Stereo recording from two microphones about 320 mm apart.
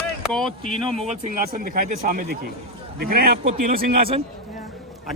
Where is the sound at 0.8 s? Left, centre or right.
Centre.